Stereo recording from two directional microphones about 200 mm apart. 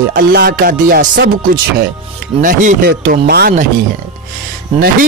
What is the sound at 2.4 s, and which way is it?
Speech, 45° right (ahead or behind).